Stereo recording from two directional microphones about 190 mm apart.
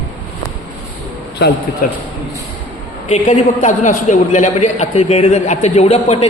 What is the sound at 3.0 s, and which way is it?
A man's voice, 40° left (ahead or behind).